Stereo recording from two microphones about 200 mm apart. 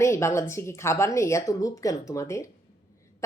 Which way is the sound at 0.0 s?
15° left (ahead or behind).